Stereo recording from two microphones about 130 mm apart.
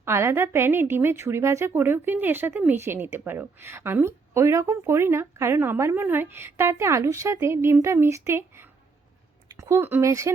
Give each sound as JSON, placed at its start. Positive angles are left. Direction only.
{"t": 0.0, "sound": "a woman's voice", "side_deg": -20}